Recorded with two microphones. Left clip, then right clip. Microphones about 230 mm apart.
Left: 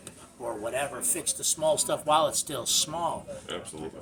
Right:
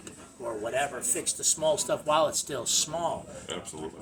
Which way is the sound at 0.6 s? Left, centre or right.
Centre.